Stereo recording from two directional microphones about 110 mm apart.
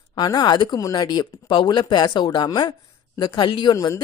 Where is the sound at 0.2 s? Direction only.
40° left (ahead or behind).